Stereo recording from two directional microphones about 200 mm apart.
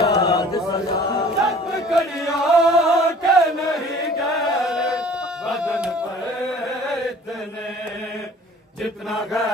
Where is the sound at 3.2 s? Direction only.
Centre (ahead or behind).